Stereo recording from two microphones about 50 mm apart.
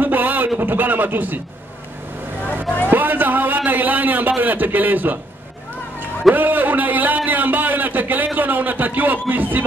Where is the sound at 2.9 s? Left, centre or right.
Right.